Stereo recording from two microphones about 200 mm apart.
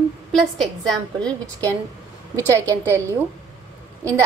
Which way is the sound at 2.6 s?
15° right (ahead or behind).